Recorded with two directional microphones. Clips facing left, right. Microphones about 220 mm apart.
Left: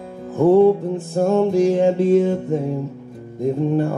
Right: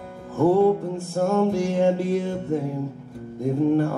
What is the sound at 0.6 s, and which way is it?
Music, 20° left (ahead or behind).